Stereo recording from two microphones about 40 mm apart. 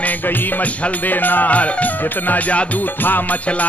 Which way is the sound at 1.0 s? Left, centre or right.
Left.